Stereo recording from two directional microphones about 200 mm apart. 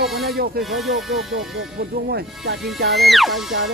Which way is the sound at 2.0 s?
50° right (ahead or behind).